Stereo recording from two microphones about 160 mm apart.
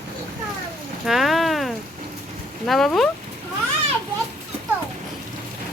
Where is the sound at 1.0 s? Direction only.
Centre (ahead or behind).